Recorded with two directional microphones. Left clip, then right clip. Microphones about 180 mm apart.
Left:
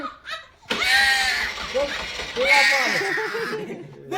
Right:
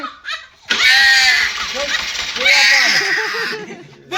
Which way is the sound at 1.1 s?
15° left (ahead or behind).